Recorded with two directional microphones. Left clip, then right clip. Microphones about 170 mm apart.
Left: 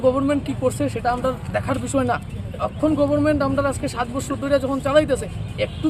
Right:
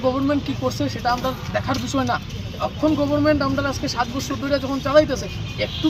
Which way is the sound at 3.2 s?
30° left (ahead or behind).